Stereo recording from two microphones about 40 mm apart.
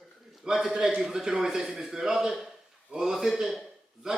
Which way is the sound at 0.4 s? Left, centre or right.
Centre.